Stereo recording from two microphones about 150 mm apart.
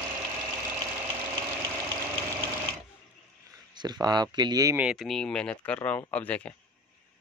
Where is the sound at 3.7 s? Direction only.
25° right (ahead or behind).